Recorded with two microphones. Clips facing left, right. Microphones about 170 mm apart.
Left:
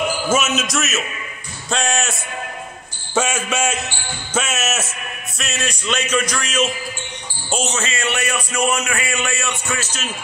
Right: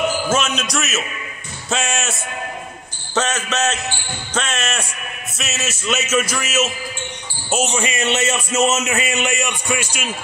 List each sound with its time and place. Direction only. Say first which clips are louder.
0.1 s a man's voice: left 1 dB; 10° left (ahead or behind)
3.2 s a man's voice: left 1 dB; 10° left (ahead or behind); by 10.0 s 10° right (ahead or behind)